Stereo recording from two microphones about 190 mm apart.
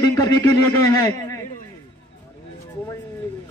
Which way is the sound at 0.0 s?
20° left (ahead or behind).